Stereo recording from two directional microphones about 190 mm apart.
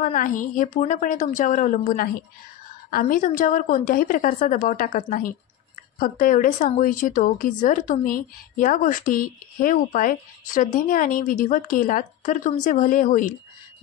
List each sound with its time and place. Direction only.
0.0 s a woman's voice: 45° left (ahead or behind)